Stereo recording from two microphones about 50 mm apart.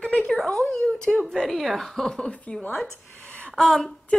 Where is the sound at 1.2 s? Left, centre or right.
Centre.